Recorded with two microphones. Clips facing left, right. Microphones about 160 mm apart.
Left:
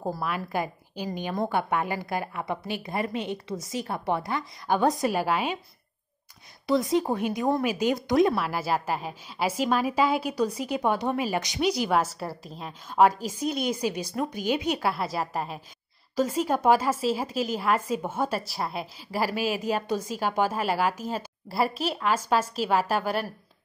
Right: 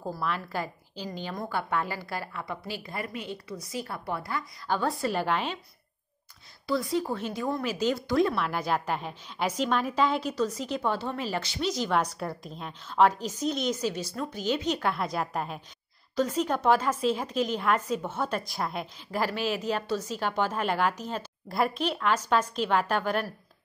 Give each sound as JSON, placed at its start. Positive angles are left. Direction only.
{"t": 0.2, "sound": "a woman's voice", "side_deg": 10}
{"t": 6.7, "sound": "a woman's voice", "side_deg": 20}
{"t": 8.4, "sound": "a woman's voice", "side_deg": 5}